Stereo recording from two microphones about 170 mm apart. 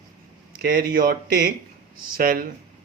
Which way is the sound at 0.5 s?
65° right (ahead or behind).